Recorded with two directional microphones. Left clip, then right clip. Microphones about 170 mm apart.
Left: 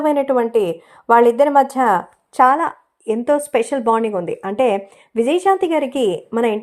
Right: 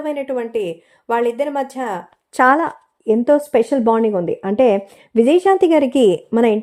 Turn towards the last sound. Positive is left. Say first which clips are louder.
# right 3 dB
turn(degrees=-50)  # may be behind; listen again after turning